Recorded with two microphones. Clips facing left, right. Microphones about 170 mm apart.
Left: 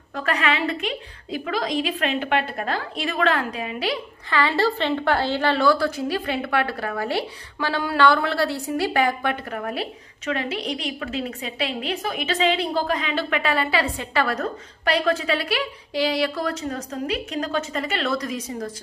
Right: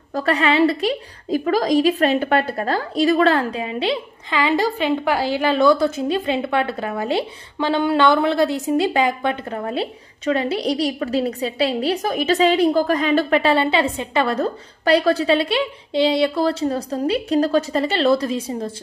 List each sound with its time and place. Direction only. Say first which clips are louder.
0.1 s a woman's voice: right 5 dB; 35° right (ahead or behind)